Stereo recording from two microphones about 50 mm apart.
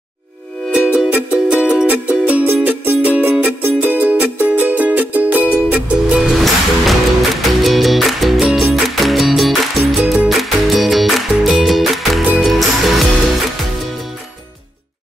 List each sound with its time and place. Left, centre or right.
0.7 s music: right
2.4 s music: right
3.0 s music: right; by 6.3 s centre
6.3 s music: centre